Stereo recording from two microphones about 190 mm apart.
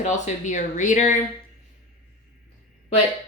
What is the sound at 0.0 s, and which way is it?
Speech, 40° left (ahead or behind).